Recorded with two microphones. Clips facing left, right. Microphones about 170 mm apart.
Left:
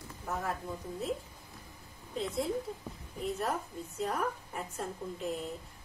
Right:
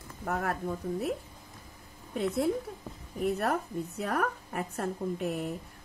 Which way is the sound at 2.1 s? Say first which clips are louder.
Right 5 dB; 60° right (ahead or behind).